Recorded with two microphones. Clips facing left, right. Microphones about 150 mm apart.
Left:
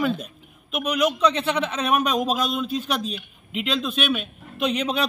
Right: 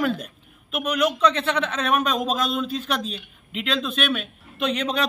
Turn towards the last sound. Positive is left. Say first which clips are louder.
# left 1 dB
turn(degrees=5)  # may be behind; listen again after turning